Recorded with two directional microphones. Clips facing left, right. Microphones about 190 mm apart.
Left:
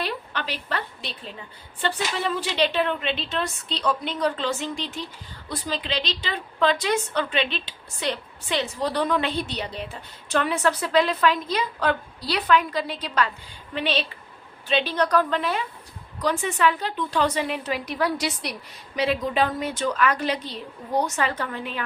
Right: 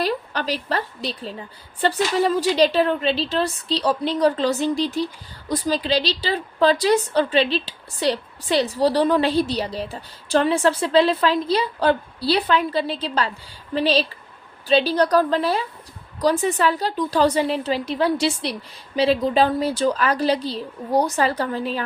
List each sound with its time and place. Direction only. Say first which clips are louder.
0.0 s a woman's voice: right 6 dB; 40° right (ahead or behind)